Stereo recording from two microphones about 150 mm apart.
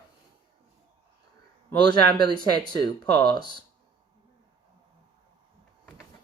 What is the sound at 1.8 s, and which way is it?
Speech, 30° left (ahead or behind).